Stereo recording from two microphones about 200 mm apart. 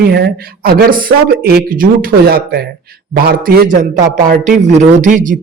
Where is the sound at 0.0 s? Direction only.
55° right (ahead or behind).